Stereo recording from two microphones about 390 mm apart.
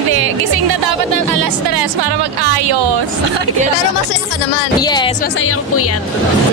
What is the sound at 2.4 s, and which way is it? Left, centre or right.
Speech, right.